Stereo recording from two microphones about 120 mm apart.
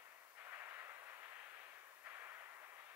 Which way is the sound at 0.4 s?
20° right (ahead or behind).